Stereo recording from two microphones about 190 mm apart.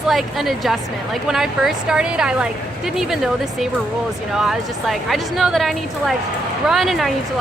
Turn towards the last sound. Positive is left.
turn(degrees=0)  # may be behind; listen again after turning